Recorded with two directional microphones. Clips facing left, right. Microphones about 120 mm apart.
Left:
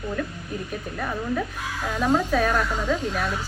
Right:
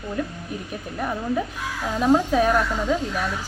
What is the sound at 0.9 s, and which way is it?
A woman's voice, 15° right (ahead or behind).